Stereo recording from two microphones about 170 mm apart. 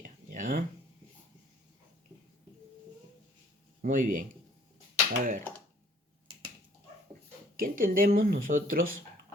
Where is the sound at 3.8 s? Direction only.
55° right (ahead or behind).